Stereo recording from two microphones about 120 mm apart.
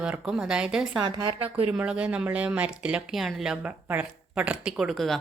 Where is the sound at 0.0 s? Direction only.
5° right (ahead or behind).